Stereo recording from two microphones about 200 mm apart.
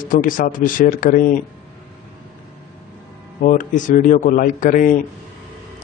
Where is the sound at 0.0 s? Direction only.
45° left (ahead or behind).